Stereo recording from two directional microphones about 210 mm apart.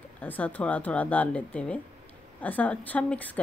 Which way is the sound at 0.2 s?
5° left (ahead or behind).